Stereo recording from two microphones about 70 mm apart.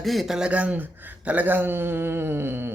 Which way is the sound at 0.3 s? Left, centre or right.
Centre.